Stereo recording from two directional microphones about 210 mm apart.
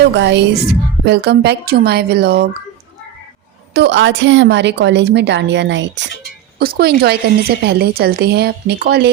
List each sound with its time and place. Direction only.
0.0 s speech: 55° right (ahead or behind)
3.8 s a woman's voice: 60° right (ahead or behind)
6.6 s speech: 45° right (ahead or behind)